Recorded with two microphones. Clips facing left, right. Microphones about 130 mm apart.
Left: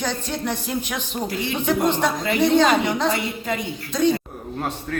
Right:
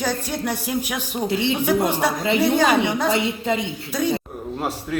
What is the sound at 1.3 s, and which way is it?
Speech, 25° right (ahead or behind).